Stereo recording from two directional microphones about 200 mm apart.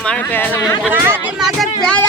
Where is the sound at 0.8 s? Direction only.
10° right (ahead or behind).